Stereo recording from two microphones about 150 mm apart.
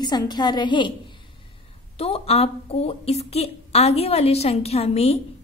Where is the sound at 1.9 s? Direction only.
40° left (ahead or behind).